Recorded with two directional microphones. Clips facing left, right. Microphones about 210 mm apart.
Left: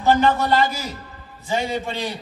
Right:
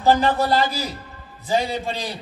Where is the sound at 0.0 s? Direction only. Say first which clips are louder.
Even; 35° right (ahead or behind).